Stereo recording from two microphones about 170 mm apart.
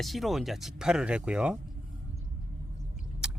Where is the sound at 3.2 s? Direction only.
5° right (ahead or behind).